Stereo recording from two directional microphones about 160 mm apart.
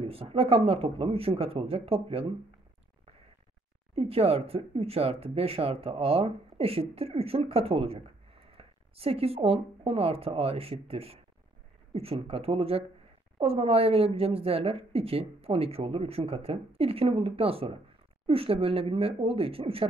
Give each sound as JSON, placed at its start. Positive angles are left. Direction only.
{"t": 0.0, "sound": "a woman's voice", "side_deg": -35}
{"t": 3.9, "sound": "a woman's voice", "side_deg": -35}